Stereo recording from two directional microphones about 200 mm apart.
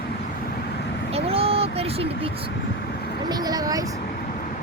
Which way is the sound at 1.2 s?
30° right (ahead or behind).